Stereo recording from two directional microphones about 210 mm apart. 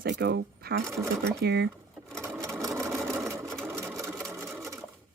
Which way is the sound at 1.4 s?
55° right (ahead or behind).